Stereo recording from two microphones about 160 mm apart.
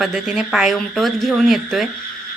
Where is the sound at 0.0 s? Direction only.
Centre (ahead or behind).